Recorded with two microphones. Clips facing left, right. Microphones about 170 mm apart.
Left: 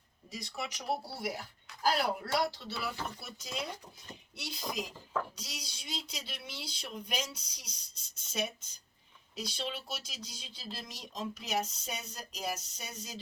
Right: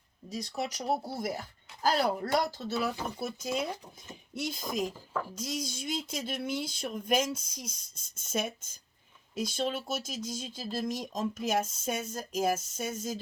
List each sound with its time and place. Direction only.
0.3 s speech: 40° right (ahead or behind)